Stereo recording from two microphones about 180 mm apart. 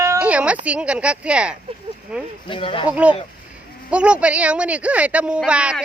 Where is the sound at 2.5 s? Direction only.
30° left (ahead or behind).